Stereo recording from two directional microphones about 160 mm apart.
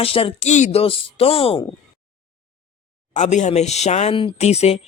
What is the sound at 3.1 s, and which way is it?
Speech, 50° left (ahead or behind).